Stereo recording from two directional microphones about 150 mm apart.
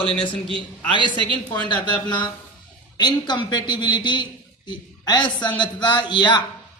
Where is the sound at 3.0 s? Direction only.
30° left (ahead or behind).